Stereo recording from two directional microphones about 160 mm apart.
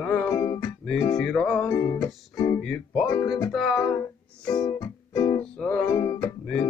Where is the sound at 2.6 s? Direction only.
5° left (ahead or behind).